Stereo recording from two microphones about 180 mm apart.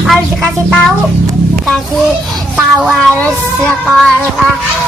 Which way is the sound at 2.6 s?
Centre (ahead or behind).